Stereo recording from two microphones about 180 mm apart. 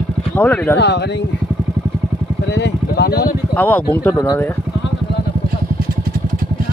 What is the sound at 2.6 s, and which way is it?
Speech, 70° left (ahead or behind).